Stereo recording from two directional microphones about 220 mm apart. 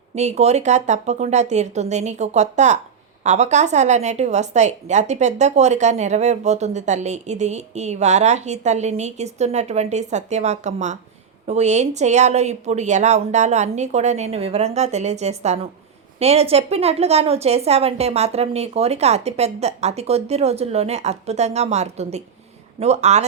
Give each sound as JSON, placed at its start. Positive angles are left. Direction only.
{"t": 0.2, "sound": "a woman's voice", "side_deg": -30}